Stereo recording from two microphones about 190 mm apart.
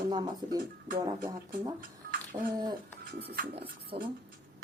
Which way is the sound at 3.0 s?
60° right (ahead or behind).